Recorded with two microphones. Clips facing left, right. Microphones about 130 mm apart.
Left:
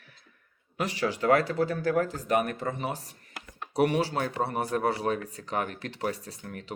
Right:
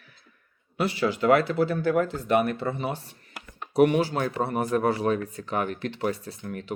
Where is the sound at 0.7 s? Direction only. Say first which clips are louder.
Right 4 dB; 35° left (ahead or behind).